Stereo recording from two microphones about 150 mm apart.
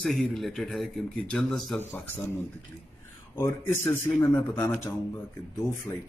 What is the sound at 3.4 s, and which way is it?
A man's voice, 15° left (ahead or behind).